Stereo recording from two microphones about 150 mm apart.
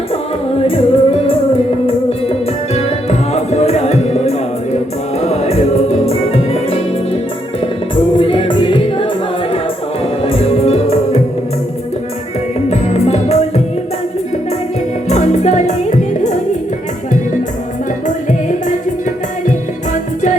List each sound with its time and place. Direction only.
0.6 s music: 40° left (ahead or behind)
2.7 s music: 45° left (ahead or behind)
12.6 s music: 45° left (ahead or behind)
15.1 s music: 50° left (ahead or behind)
19.5 s music: 55° left (ahead or behind)